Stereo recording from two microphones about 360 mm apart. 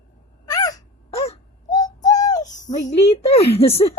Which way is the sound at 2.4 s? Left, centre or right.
Centre.